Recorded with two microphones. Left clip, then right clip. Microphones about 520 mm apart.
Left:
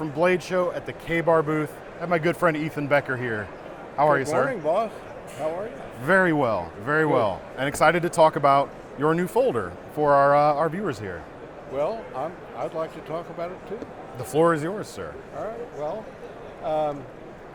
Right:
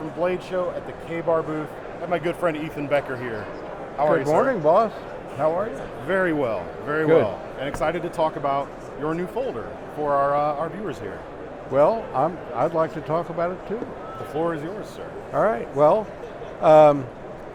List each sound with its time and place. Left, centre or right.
0.2 s a man's voice: left
4.6 s a man's voice: right
6.1 s a man's voice: left
11.7 s a man's voice: right
14.3 s speech: left
15.4 s speech: right